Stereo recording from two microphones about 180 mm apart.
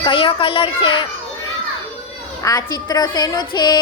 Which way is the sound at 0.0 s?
30° left (ahead or behind).